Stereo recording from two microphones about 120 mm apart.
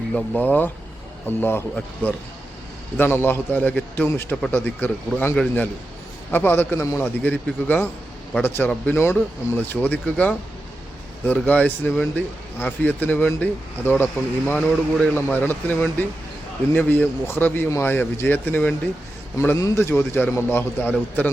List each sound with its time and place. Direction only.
0.1 s speech: 10° left (ahead or behind)
11.4 s a man's voice: 10° left (ahead or behind)